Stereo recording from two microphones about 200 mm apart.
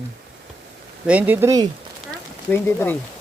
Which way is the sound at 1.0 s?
10° right (ahead or behind).